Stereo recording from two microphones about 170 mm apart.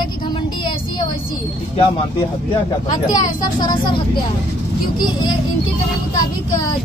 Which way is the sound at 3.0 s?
25° left (ahead or behind).